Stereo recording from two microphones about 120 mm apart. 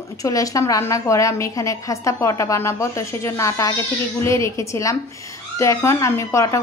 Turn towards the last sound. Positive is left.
turn(degrees=25)  # may be behind; listen again after turning